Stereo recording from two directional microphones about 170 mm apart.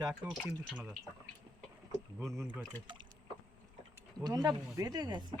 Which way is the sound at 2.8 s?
30° right (ahead or behind).